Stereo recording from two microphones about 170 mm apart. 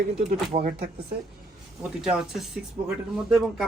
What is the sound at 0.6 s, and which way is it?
Speech, 60° right (ahead or behind).